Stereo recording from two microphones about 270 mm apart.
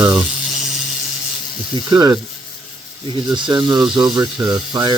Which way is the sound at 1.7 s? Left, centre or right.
Centre.